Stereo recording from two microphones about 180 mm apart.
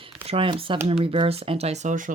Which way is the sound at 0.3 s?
30° right (ahead or behind).